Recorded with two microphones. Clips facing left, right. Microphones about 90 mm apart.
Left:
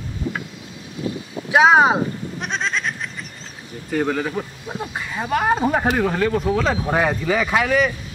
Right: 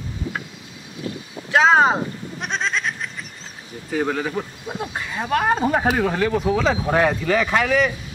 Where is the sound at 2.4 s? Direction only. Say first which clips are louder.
Even; centre (ahead or behind).